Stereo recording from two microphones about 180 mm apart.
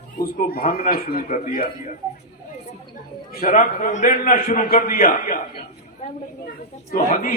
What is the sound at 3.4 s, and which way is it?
A man's voice, 50° left (ahead or behind).